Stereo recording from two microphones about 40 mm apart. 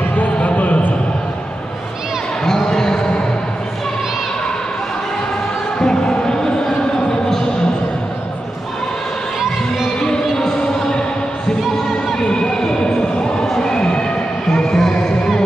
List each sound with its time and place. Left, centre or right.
0.2 s a sound: left
2.4 s basketball bounce: centre
5.8 s music: centre
9.9 s music: centre
11.7 s a sound: centre
14.5 s music: centre